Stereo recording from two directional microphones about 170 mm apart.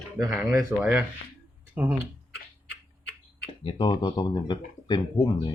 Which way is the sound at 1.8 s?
10° right (ahead or behind).